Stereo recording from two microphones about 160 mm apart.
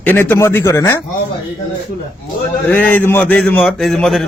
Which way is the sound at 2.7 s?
10° left (ahead or behind).